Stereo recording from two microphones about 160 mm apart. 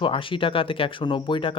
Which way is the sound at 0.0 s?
30° left (ahead or behind).